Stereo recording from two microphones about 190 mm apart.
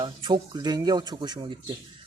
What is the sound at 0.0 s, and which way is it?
Speech, 25° right (ahead or behind).